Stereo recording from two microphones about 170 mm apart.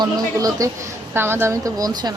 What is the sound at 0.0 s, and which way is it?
A woman's voice, 20° right (ahead or behind).